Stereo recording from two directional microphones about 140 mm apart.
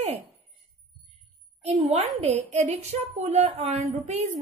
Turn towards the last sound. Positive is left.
turn(degrees=-55)  # may be behind; listen again after turning